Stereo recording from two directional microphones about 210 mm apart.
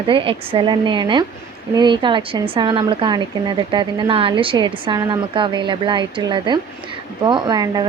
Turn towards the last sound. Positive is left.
turn(degrees=-20)  # may be behind; listen again after turning